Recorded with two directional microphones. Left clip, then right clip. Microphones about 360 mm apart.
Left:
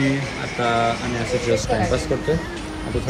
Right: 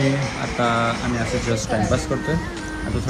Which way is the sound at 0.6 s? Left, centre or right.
Centre.